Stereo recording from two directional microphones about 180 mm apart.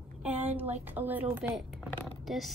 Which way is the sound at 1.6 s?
Centre (ahead or behind).